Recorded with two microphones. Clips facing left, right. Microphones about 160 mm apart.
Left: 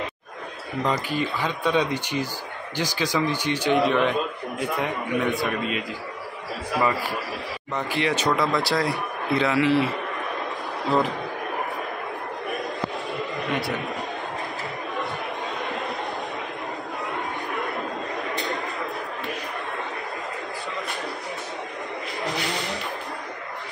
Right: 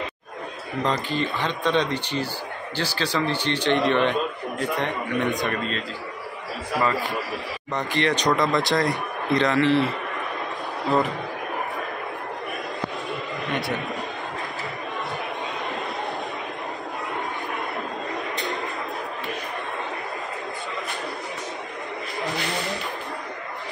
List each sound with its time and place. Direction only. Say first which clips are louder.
0.8 s a man's voice: even; 10° left (ahead or behind)
7.7 s speech: right 1 dB; 5° left (ahead or behind)
13.5 s speech: right 1 dB; centre (ahead or behind)